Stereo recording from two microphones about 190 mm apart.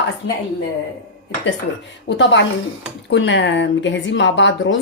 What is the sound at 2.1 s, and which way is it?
A woman's voice, 70° left (ahead or behind).